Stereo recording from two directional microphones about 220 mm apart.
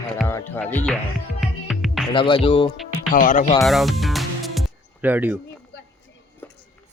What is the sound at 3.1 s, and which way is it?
Speech, 35° left (ahead or behind).